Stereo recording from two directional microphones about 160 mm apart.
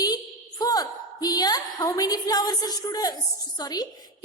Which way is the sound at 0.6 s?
25° left (ahead or behind).